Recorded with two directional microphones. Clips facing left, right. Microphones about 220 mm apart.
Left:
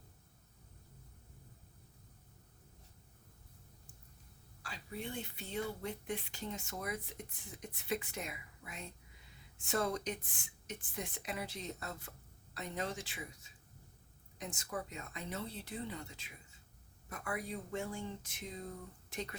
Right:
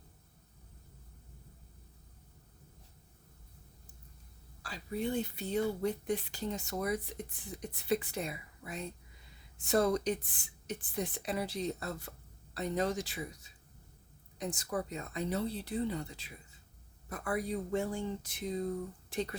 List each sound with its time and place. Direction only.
4.6 s speech: 40° right (ahead or behind)